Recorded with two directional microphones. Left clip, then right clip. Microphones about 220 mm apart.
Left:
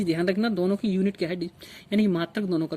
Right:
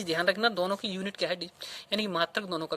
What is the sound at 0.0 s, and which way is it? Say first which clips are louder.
Speech: left 1 dB; 25° right (ahead or behind).